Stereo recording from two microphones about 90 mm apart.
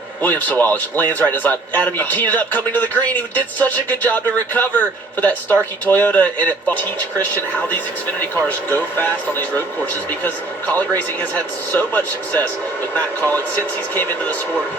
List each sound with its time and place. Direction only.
0.2 s a woman's voice: 20° left (ahead or behind)
13.9 s speech: 20° left (ahead or behind)